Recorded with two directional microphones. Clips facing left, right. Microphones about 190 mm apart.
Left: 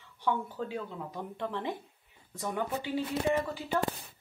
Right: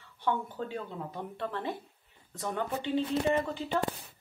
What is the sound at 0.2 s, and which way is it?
Speech, 10° left (ahead or behind).